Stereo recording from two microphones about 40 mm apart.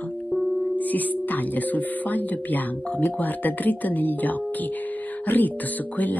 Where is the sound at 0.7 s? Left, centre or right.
Left.